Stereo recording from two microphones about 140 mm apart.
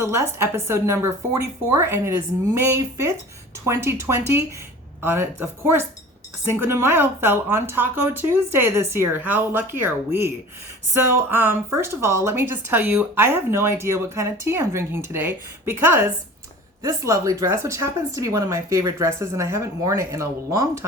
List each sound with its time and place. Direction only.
0.0 s a woman's voice: 20° right (ahead or behind)